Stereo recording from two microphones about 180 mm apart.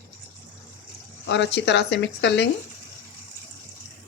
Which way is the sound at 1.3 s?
75° left (ahead or behind).